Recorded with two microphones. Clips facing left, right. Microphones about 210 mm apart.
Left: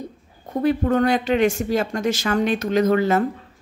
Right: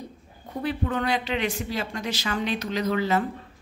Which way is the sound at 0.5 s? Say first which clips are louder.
Left 9 dB; 45° left (ahead or behind).